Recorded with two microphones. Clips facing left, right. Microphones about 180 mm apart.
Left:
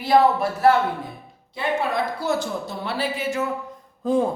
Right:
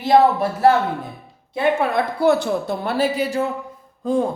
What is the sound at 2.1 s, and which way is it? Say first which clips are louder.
Speech: right 7 dB; 60° right (ahead or behind).